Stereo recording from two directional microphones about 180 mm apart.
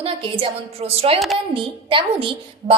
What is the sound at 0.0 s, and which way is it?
A woman's voice, 30° right (ahead or behind).